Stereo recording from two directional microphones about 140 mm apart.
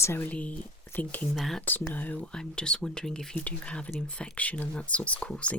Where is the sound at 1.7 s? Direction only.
15° left (ahead or behind).